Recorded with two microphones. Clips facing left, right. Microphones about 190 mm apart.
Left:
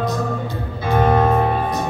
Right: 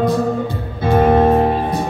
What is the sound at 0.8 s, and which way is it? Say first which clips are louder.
Music: right 4 dB; 30° right (ahead or behind).